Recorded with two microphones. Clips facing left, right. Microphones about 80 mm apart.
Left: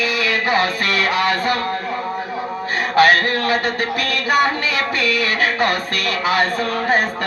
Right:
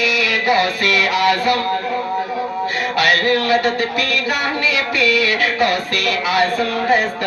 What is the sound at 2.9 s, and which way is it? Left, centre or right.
Music, left.